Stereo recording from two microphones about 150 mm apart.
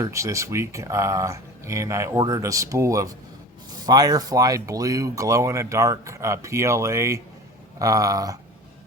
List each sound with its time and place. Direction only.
0.0 s speech: 20° right (ahead or behind)